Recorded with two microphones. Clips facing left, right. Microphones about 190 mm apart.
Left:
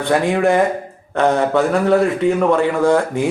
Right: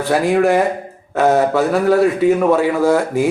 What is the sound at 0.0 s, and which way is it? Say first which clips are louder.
Speech: right 1 dB; centre (ahead or behind).